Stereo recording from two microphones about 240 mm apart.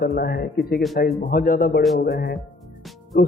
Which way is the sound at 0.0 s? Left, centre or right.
Left.